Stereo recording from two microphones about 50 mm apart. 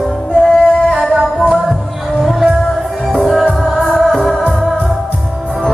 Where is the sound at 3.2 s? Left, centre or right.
Centre.